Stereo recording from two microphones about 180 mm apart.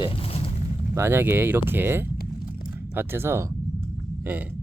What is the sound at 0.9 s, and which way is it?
Speech, 15° right (ahead or behind).